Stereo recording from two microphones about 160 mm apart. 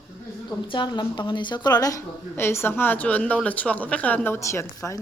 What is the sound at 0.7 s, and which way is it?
A woman's voice, 30° left (ahead or behind).